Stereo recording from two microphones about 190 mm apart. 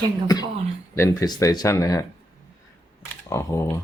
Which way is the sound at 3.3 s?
15° left (ahead or behind).